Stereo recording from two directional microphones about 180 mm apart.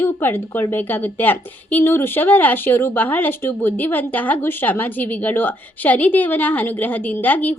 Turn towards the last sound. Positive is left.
turn(degrees=10)  # may be behind; listen again after turning